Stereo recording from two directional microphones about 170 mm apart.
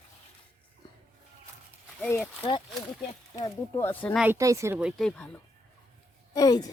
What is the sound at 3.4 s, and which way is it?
Speech, 20° left (ahead or behind).